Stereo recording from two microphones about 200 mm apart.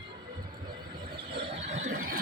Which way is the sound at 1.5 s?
35° right (ahead or behind).